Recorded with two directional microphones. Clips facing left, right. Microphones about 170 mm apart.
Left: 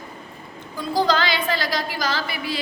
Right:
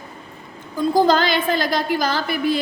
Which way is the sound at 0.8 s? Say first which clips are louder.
Right 5 dB; 50° right (ahead or behind).